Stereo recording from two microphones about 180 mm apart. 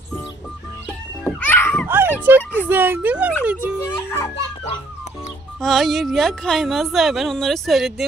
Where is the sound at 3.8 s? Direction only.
15° left (ahead or behind).